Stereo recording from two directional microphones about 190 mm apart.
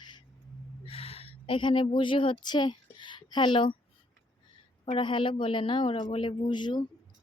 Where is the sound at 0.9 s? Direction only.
30° left (ahead or behind).